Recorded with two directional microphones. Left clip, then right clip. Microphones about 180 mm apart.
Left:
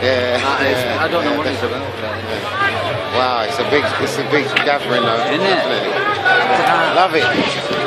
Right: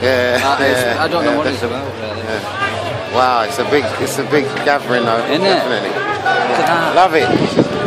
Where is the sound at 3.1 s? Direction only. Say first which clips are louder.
Right 4 dB; 25° right (ahead or behind).